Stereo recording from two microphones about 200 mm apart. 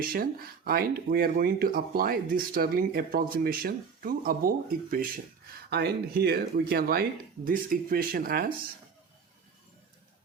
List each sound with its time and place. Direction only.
0.0 s speech: 45° right (ahead or behind)